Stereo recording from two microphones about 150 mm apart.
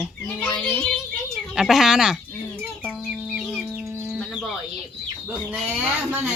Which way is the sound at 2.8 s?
Centre (ahead or behind).